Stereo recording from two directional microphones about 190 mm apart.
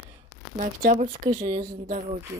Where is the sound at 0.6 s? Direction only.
40° right (ahead or behind).